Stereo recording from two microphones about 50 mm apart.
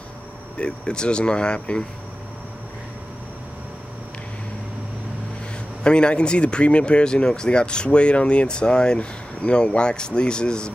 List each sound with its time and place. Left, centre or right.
0.6 s speech: centre
5.9 s speech: centre